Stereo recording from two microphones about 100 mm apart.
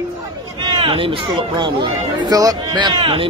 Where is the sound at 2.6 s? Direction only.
50° right (ahead or behind).